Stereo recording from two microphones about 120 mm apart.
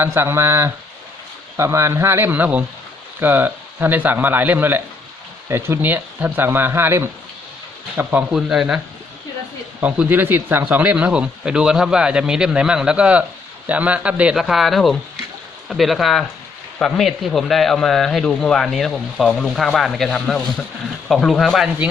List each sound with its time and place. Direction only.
0.0 s speech: 20° right (ahead or behind)
8.4 s speech: 5° right (ahead or behind)
9.8 s speech: 15° right (ahead or behind)